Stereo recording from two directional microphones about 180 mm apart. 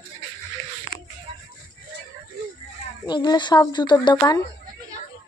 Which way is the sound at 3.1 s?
25° left (ahead or behind).